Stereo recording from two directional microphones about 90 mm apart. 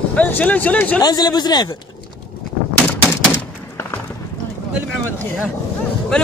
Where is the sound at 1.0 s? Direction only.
50° left (ahead or behind).